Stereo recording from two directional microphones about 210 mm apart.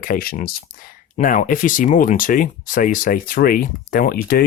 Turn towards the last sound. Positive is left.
turn(degrees=45)  # may be behind; listen again after turning